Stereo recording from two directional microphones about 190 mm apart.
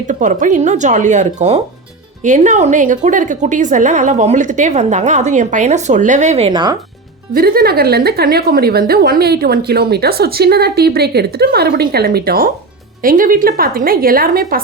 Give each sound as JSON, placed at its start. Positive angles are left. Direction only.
{"t": 0.1, "sound": "a woman's voice", "side_deg": -40}
{"t": 7.3, "sound": "a woman's voice", "side_deg": -50}